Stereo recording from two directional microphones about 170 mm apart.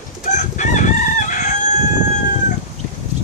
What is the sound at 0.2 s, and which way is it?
Chicken, 45° left (ahead or behind).